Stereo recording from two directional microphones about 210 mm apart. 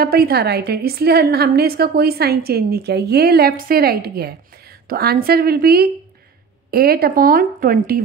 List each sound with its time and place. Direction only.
0.0 s a woman's voice: 45° right (ahead or behind)